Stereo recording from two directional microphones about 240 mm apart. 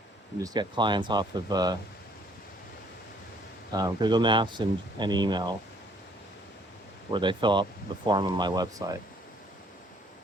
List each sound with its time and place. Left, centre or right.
0.3 s speech: centre
3.7 s speech: centre
7.1 s speech: centre